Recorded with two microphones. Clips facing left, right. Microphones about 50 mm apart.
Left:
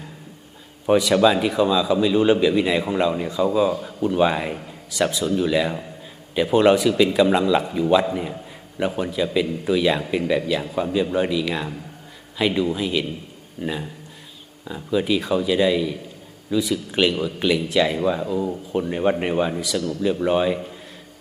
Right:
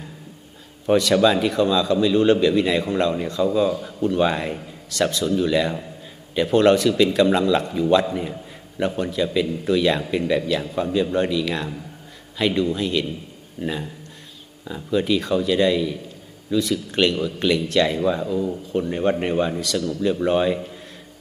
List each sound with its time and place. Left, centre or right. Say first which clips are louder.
0.9 s a man's voice: even; centre